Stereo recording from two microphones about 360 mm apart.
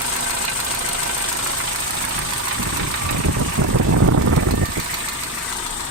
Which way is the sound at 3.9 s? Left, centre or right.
Right.